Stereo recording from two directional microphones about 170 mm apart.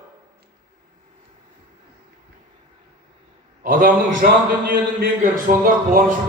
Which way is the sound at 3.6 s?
55° right (ahead or behind).